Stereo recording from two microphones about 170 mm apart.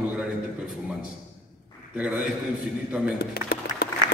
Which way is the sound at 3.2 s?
70° left (ahead or behind).